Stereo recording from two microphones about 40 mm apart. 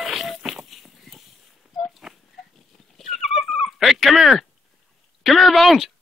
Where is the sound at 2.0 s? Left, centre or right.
Centre.